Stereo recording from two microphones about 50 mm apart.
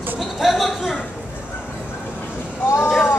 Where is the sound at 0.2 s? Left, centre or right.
Centre.